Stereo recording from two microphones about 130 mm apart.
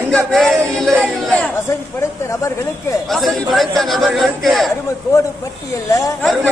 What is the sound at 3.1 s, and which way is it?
A man's voice, centre (ahead or behind).